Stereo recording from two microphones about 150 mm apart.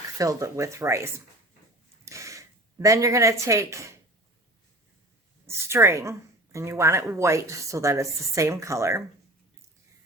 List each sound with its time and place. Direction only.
0.2 s speech: 20° right (ahead or behind)
5.5 s speech: 15° right (ahead or behind)